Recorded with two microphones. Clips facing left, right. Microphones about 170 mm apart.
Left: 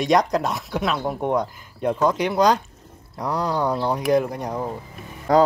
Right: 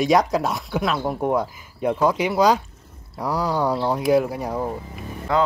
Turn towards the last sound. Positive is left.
turn(degrees=40)  # may be behind; listen again after turning